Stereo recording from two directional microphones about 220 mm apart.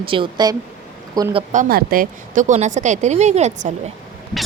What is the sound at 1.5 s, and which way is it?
Speech, 40° right (ahead or behind).